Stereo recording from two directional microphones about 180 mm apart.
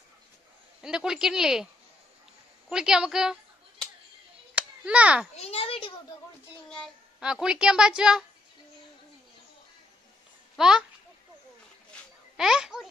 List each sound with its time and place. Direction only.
0.8 s a woman's voice: 5° right (ahead or behind)
2.7 s a woman's voice: 5° right (ahead or behind)
4.6 s a child's voice: 5° right (ahead or behind)
5.3 s a child's voice: 35° left (ahead or behind)
6.7 s a woman's voice: centre (ahead or behind)
10.6 s a woman's voice: 5° right (ahead or behind)
11.9 s a sound: centre (ahead or behind)